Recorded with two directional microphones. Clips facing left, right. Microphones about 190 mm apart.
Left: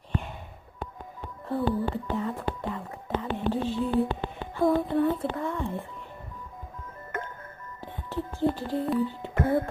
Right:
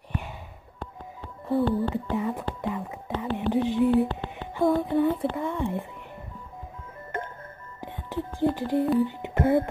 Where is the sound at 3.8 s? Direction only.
65° right (ahead or behind).